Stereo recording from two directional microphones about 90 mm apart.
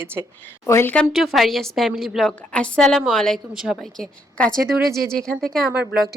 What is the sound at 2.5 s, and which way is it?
Speech, 10° left (ahead or behind).